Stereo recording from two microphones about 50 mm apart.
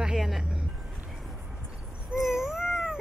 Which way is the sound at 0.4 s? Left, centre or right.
Centre.